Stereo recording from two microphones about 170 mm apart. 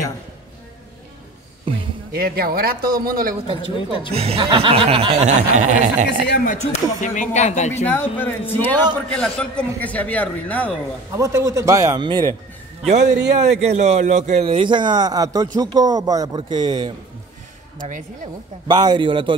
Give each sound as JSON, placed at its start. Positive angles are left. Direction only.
{"t": 1.7, "sound": "speech", "side_deg": -30}
{"t": 2.1, "sound": "speech", "side_deg": -60}
{"t": 3.3, "sound": "speech", "side_deg": -35}
{"t": 6.4, "sound": "speech", "side_deg": 45}
{"t": 7.7, "sound": "a man's voice", "side_deg": 10}
{"t": 11.1, "sound": "a man's voice", "side_deg": -20}
{"t": 12.8, "sound": "speech", "side_deg": -45}
{"t": 14.5, "sound": "a man's voice", "side_deg": -30}
{"t": 17.7, "sound": "speech", "side_deg": -50}
{"t": 18.7, "sound": "a man's voice", "side_deg": -25}